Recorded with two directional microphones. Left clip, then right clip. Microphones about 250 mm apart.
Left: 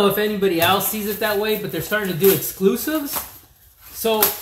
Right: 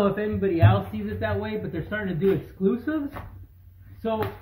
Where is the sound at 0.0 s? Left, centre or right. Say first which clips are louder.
Left 6 dB; centre.